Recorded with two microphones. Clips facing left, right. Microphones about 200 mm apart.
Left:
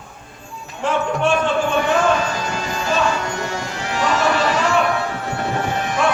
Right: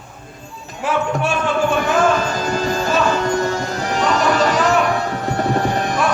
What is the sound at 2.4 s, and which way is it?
Music, 35° right (ahead or behind).